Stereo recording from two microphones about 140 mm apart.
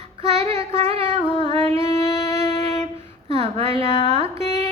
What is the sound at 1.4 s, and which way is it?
Music, 45° right (ahead or behind).